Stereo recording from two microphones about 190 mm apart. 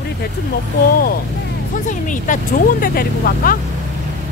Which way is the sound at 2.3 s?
40° left (ahead or behind).